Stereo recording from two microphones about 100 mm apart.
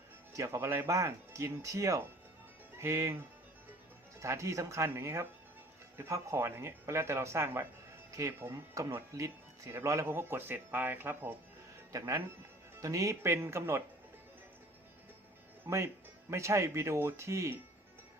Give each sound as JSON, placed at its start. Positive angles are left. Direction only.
{"t": 0.3, "sound": "speech", "side_deg": -30}
{"t": 4.2, "sound": "speech", "side_deg": -30}
{"t": 11.9, "sound": "speech", "side_deg": -30}
{"t": 15.6, "sound": "speech", "side_deg": -25}